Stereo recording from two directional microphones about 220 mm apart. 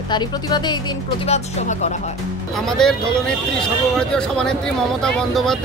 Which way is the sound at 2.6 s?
Centre (ahead or behind).